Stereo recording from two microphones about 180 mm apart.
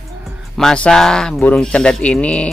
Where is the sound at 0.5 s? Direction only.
5° left (ahead or behind).